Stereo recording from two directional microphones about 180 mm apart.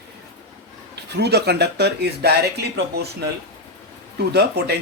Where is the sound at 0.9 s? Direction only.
70° right (ahead or behind).